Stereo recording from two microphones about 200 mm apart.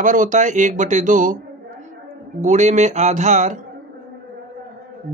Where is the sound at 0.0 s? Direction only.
40° right (ahead or behind).